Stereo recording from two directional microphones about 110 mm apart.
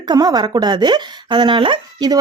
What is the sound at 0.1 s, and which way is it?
Speech, 35° right (ahead or behind).